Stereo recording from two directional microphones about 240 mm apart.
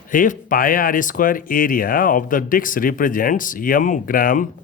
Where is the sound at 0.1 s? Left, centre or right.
Left.